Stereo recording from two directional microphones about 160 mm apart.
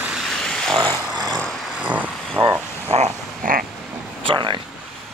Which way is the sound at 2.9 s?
45° right (ahead or behind).